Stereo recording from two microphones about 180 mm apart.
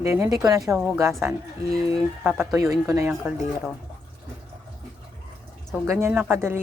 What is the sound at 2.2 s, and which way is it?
Speech, 10° right (ahead or behind).